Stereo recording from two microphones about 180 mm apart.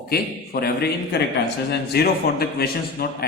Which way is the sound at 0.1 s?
60° left (ahead or behind).